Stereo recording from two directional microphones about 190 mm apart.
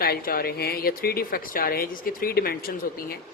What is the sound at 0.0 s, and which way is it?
Speech, 50° left (ahead or behind).